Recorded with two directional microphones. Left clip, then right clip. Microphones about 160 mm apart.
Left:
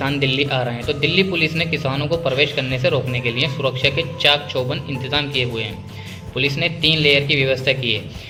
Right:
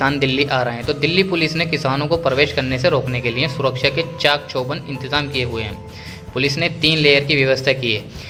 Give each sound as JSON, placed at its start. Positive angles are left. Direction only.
{"t": 0.0, "sound": "a man's voice", "side_deg": -35}